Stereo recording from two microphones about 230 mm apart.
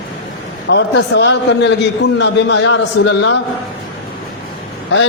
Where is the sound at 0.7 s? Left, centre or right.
Left.